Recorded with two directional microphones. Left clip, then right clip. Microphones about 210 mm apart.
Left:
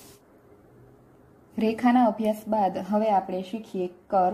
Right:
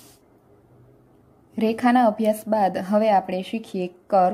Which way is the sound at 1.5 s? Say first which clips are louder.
Right 3 dB; 15° right (ahead or behind).